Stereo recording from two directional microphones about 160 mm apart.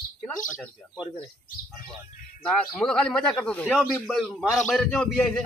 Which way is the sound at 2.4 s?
5° left (ahead or behind).